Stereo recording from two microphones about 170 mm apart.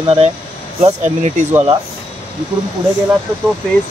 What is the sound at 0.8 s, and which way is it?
Speech, 45° right (ahead or behind).